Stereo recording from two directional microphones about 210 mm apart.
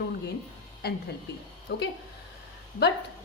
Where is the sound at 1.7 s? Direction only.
55° left (ahead or behind).